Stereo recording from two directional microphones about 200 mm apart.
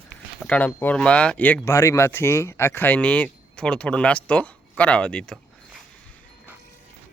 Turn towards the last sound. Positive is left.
turn(degrees=5)  # may be behind; listen again after turning